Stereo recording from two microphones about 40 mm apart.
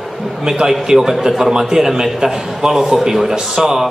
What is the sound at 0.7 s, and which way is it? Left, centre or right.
A man's voice, centre.